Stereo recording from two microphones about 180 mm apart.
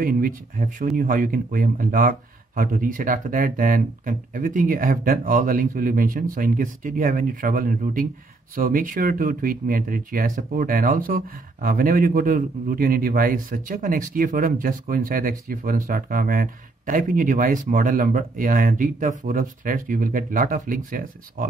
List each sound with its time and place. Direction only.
0.0 s speech: 50° right (ahead or behind)